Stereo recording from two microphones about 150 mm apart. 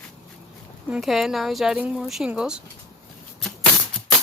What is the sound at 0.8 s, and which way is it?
Speech, 5° right (ahead or behind).